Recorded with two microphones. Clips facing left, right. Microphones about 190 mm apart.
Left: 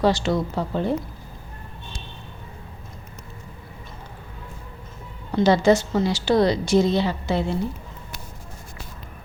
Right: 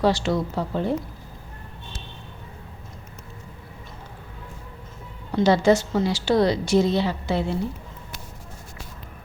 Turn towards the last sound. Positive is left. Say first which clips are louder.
# left 1 dB
turn(degrees=-5)  # may be behind; listen again after turning